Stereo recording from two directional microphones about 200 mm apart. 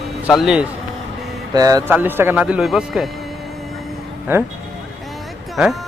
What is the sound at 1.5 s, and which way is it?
Speech, 20° right (ahead or behind).